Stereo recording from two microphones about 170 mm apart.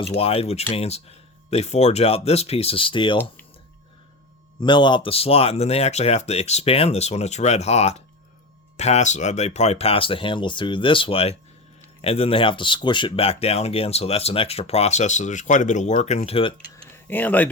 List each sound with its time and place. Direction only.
0.1 s speech: 35° left (ahead or behind)
4.6 s speech: 25° left (ahead or behind)
16.7 s a sound: 10° left (ahead or behind)